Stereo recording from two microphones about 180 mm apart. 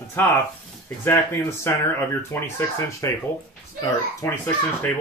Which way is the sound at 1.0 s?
15° left (ahead or behind).